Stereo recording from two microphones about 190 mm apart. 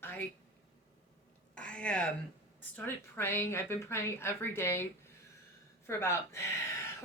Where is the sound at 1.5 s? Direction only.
5° left (ahead or behind).